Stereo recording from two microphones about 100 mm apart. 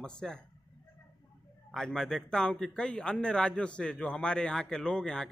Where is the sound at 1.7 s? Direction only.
5° left (ahead or behind).